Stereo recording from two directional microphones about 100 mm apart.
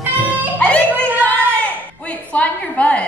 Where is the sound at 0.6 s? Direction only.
15° left (ahead or behind).